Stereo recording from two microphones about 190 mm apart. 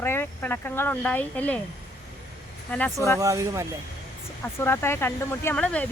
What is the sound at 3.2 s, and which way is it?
Speech, 15° right (ahead or behind).